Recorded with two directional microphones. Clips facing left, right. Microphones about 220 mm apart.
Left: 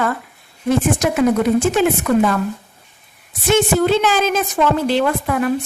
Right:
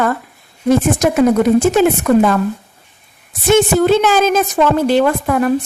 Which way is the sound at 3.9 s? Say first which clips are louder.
Right 4 dB; 45° right (ahead or behind).